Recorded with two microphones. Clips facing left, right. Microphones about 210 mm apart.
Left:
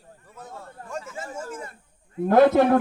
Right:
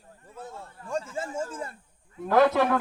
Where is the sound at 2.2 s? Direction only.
50° left (ahead or behind).